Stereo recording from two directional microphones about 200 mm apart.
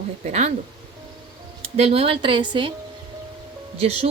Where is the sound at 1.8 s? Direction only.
30° right (ahead or behind).